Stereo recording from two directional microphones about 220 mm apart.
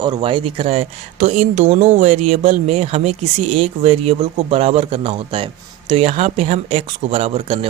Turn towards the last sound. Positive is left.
turn(degrees=-25)  # may be behind; listen again after turning